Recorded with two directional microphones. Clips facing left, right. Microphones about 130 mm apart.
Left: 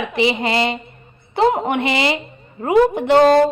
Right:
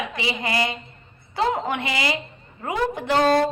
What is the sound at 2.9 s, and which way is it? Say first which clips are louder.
Speech: left 8 dB; 60° left (ahead or behind).